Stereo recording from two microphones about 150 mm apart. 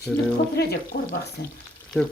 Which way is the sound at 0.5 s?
90° left.